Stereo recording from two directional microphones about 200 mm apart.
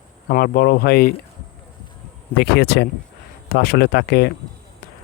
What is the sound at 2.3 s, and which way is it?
Speech, 55° left (ahead or behind).